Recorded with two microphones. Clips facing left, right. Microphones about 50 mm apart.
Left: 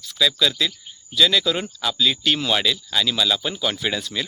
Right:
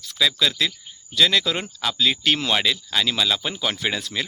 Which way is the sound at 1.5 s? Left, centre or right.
Centre.